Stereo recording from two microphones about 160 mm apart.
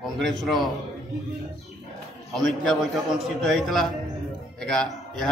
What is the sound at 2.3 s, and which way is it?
A man's voice, centre (ahead or behind).